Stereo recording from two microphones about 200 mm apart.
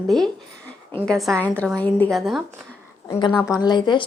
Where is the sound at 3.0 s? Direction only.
20° left (ahead or behind).